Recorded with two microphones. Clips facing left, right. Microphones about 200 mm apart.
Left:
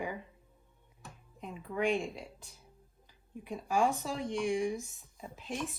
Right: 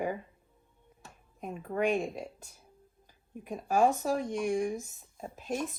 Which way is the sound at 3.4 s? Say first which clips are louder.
Right 4 dB; 45° right (ahead or behind).